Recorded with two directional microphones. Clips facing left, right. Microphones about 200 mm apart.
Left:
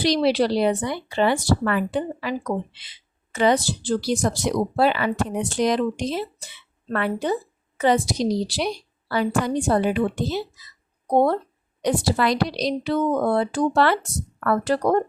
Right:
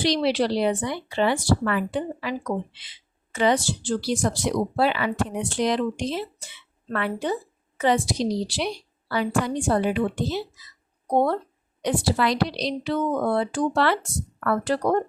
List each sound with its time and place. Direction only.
0.0 s speech: 40° left (ahead or behind)
3.3 s speech: 40° left (ahead or behind)
11.8 s a woman's voice: 40° left (ahead or behind)